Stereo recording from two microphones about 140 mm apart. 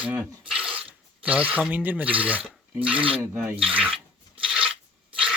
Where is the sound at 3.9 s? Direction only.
40° right (ahead or behind).